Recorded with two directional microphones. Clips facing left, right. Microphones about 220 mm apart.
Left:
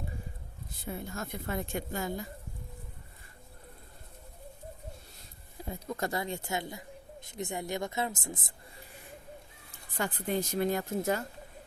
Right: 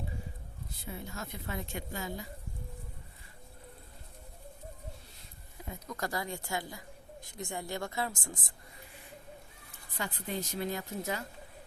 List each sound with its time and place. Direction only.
0.9 s a woman's voice: 50° left (ahead or behind)
5.6 s a woman's voice: 30° left (ahead or behind)
10.0 s a woman's voice: 50° left (ahead or behind)